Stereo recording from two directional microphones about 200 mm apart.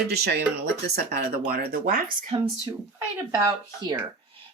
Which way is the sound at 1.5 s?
45° right (ahead or behind).